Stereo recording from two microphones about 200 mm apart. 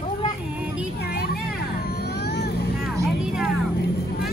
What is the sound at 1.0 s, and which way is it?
Vehicle, 50° left (ahead or behind).